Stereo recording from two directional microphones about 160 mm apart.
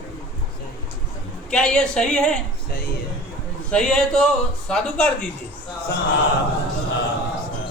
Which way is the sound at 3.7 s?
5° left (ahead or behind).